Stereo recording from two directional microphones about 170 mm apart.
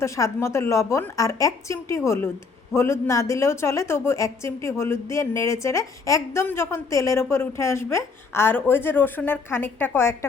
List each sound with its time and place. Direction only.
0.0 s a woman's voice: 15° left (ahead or behind)